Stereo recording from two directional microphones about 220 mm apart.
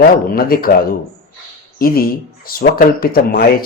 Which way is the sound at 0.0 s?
45° left (ahead or behind).